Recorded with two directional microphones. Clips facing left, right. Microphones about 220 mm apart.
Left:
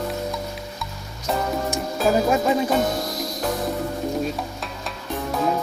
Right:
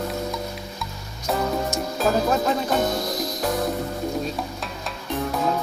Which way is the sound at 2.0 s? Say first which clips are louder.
Left 2 dB; 10° left (ahead or behind).